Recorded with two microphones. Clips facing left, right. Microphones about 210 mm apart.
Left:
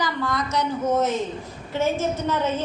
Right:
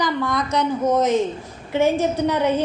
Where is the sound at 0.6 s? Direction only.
15° right (ahead or behind).